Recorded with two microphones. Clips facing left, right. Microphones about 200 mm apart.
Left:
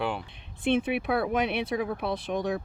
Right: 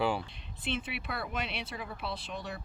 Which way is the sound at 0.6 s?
55° left (ahead or behind).